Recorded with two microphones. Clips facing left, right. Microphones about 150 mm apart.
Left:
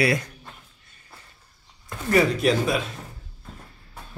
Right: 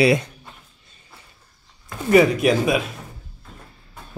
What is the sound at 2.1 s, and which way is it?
Speech, 15° right (ahead or behind).